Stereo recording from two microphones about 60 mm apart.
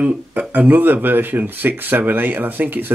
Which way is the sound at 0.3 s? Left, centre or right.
Right.